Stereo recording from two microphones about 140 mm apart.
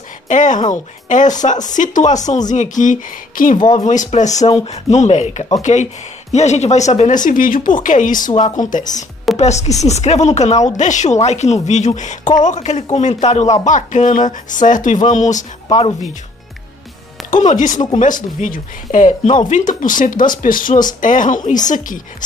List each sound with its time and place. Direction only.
0.3 s speech: 60° left (ahead or behind)
3.5 s speech: 30° left (ahead or behind)
3.8 s speech: 60° left (ahead or behind)
7.2 s speech: 75° left (ahead or behind)
9.4 s speech: 55° left (ahead or behind)
17.5 s speech: 60° left (ahead or behind); by 20.8 s 75° left (ahead or behind)
21.0 s speech: 65° left (ahead or behind)